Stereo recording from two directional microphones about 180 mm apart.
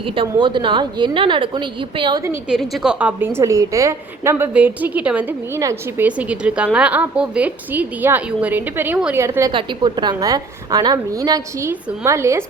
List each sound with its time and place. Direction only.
0.0 s a woman's voice: 30° right (ahead or behind)
2.5 s a woman's voice: centre (ahead or behind)
9.5 s a woman's voice: 25° right (ahead or behind)